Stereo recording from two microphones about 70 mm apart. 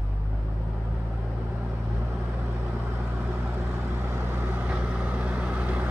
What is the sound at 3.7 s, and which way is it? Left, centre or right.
Vehicle, right.